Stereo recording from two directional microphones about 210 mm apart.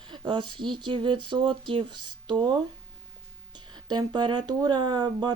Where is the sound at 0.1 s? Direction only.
20° right (ahead or behind).